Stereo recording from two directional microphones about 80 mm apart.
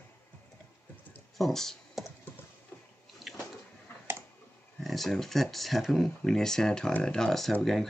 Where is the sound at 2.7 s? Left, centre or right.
Left.